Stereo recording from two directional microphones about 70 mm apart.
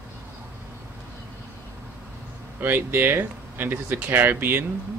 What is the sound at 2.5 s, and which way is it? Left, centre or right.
Speech, right.